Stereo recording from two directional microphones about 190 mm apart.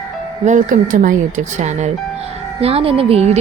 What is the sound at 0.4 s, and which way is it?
Speech, 45° right (ahead or behind).